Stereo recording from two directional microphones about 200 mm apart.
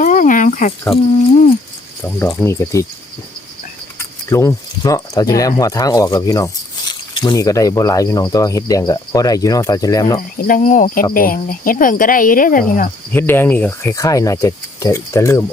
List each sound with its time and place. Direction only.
0.0 s a sound: 40° left (ahead or behind)
2.0 s speech: 10° left (ahead or behind)
4.3 s speech: 15° left (ahead or behind)
10.3 s speech: 45° left (ahead or behind)
13.1 s speech: 10° left (ahead or behind)